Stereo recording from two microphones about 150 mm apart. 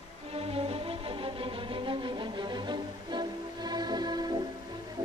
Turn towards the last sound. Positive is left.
turn(degrees=-25)  # may be behind; listen again after turning